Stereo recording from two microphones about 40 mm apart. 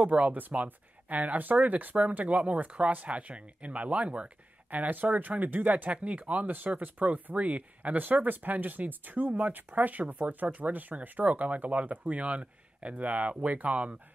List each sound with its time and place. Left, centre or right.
0.0 s speech: right